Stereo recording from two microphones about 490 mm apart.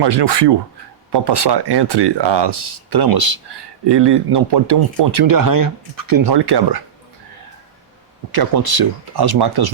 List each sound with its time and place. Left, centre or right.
0.0 s speech: right
8.3 s speech: right